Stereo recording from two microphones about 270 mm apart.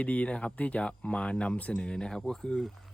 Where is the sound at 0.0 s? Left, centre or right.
Centre.